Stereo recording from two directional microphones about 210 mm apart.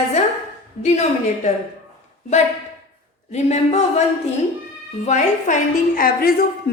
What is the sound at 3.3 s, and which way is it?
Speech, 30° left (ahead or behind).